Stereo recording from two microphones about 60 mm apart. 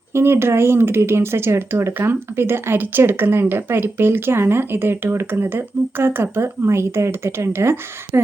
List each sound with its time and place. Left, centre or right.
0.1 s speech: right